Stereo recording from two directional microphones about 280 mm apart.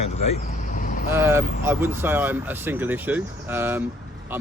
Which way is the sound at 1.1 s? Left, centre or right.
Centre.